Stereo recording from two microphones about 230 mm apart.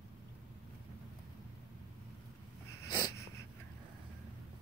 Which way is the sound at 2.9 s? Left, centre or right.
Centre.